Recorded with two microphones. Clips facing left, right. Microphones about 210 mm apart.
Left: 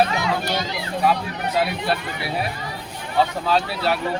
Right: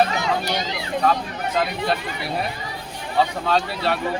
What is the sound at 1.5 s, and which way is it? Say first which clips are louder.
Speech: even; 5° left (ahead or behind).